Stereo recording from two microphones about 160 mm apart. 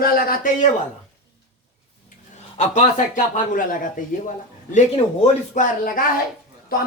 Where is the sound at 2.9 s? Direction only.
55° left (ahead or behind).